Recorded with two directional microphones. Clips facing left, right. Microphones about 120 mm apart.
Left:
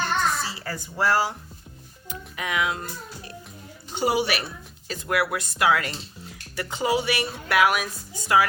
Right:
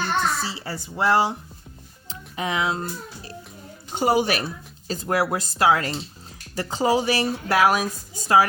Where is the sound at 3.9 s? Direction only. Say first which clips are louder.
Right 3 dB; 45° right (ahead or behind).